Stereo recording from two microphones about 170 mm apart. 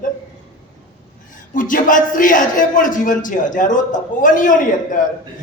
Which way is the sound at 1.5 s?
50° left (ahead or behind).